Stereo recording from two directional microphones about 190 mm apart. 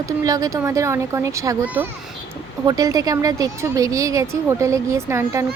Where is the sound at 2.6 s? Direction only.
20° right (ahead or behind).